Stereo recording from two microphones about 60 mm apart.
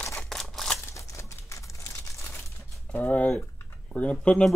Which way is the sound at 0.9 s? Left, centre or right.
Left.